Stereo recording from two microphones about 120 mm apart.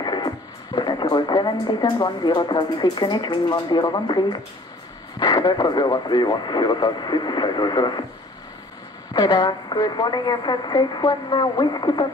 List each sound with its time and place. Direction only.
0.0 s a woman's voice: 35° left (ahead or behind)
9.1 s a woman's voice: 35° left (ahead or behind)